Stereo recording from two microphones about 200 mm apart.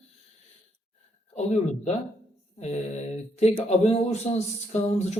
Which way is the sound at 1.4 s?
35° left (ahead or behind).